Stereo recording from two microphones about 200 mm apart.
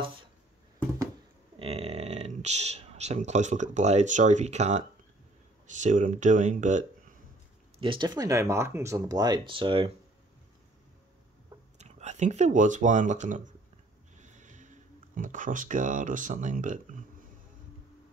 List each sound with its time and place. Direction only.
1.6 s speech: 30° right (ahead or behind)
7.8 s speech: 25° right (ahead or behind)
11.8 s speech: 35° right (ahead or behind)